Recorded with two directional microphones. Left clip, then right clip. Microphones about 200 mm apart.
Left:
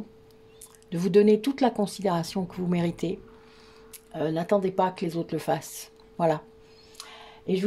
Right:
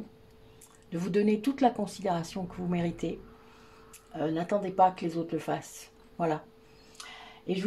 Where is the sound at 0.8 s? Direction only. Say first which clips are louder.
Left 8 dB; 45° left (ahead or behind).